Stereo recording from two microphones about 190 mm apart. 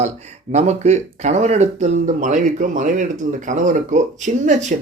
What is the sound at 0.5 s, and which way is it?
A man's voice, 35° right (ahead or behind).